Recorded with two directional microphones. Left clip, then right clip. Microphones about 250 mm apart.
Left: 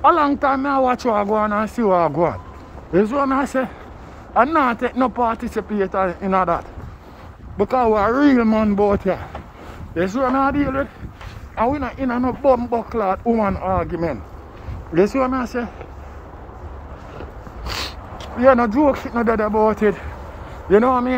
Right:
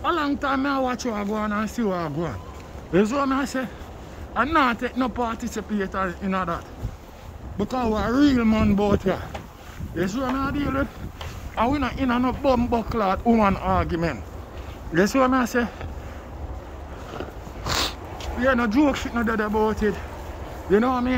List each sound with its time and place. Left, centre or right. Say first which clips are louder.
0.0 s speech: left 9 dB; centre
2.9 s speech: left 4 dB; centre
17.6 s dog: right 2 dB; centre
18.4 s speech: left 7 dB; centre